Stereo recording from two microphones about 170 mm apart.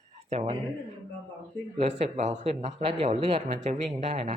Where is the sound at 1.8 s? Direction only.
40° right (ahead or behind).